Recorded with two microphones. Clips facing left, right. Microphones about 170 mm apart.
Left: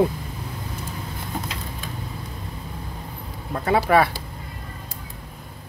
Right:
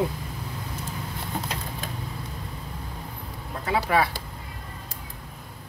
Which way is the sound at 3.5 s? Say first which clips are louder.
Left 6 dB; 60° left (ahead or behind).